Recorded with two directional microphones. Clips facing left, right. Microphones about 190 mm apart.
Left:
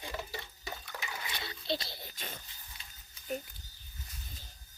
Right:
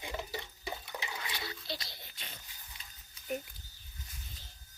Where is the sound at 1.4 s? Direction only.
25° left (ahead or behind).